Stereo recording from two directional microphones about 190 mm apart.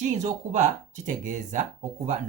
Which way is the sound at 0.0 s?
40° right (ahead or behind).